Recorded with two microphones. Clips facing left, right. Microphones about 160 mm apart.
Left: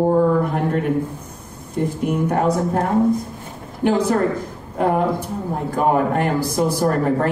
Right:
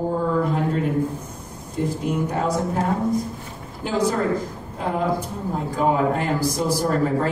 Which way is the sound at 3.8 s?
60° left (ahead or behind).